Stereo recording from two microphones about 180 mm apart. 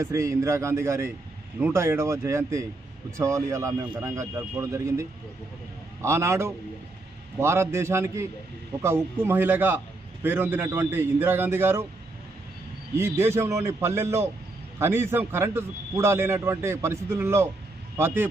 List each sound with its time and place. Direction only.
0.0 s a man's voice: 15° right (ahead or behind)
13.0 s a man's voice: 15° right (ahead or behind)